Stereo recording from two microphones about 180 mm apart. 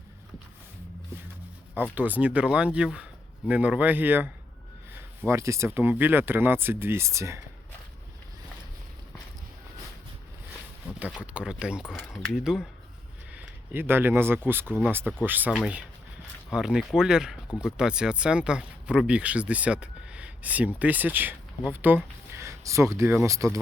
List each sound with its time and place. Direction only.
2.0 s speech: 10° right (ahead or behind)
11.2 s speech: 5° right (ahead or behind)